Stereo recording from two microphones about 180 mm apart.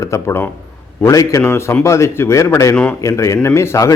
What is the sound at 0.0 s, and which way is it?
A man's voice, 15° left (ahead or behind).